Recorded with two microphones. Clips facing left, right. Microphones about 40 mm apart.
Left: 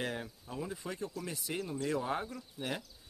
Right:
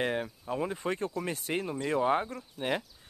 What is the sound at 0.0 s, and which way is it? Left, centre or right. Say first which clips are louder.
Speech: right 7 dB; right.